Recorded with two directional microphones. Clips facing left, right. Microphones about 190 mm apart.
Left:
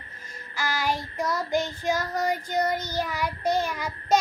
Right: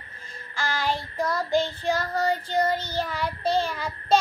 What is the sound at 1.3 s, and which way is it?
Child singing, 30° right (ahead or behind).